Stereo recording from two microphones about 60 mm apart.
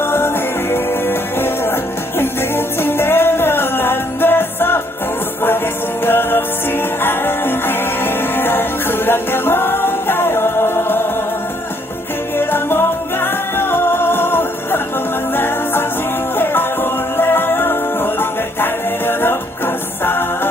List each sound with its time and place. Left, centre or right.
0.0 s music: left
6.1 s music: left
12.4 s music: left